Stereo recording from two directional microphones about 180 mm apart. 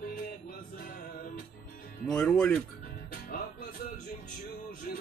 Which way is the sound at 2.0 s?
5° left (ahead or behind).